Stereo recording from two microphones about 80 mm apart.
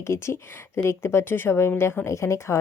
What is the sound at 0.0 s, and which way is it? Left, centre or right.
Speech, left.